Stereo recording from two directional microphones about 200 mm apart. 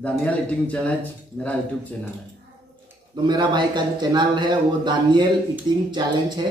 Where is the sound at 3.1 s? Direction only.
20° right (ahead or behind).